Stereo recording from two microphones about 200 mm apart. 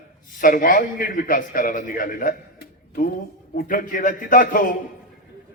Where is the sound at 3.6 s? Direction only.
45° left (ahead or behind).